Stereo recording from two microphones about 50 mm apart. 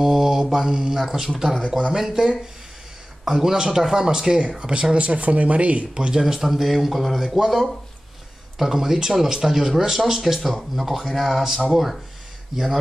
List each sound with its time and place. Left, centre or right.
0.0 s mantra: centre
0.7 s speech: centre
1.3 s speech: centre; by 5.9 s right
5.9 s speech: centre